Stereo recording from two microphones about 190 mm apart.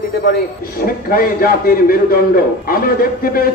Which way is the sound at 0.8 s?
50° left (ahead or behind).